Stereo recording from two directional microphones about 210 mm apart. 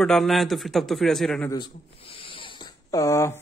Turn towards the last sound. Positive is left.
turn(degrees=15)  # may be behind; listen again after turning